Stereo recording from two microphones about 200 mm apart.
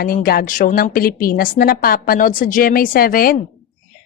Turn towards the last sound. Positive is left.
turn(degrees=45)  # may be behind; listen again after turning